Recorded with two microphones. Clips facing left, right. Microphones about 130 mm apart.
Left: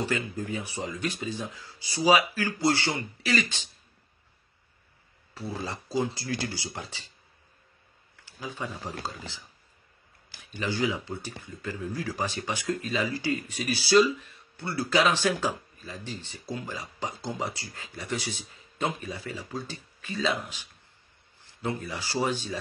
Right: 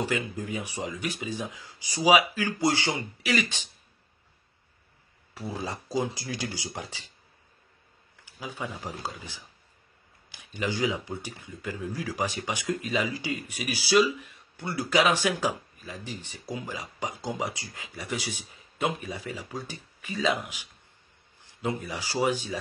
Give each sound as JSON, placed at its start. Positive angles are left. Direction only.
{"t": 0.0, "sound": "speech", "side_deg": -15}
{"t": 5.3, "sound": "speech", "side_deg": -15}
{"t": 8.3, "sound": "speech", "side_deg": -10}